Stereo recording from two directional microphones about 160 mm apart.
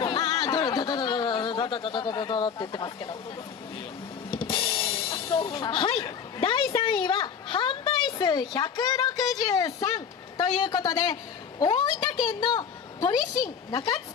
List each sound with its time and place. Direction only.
0.0 s speech: 25° left (ahead or behind)
4.3 s drum kit: 35° left (ahead or behind)
5.5 s a woman's voice: 30° left (ahead or behind)